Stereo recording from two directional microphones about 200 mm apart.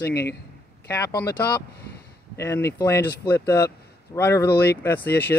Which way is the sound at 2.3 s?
15° left (ahead or behind).